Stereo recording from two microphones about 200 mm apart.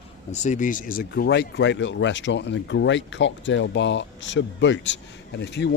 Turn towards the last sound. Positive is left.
turn(degrees=60)  # may be behind; listen again after turning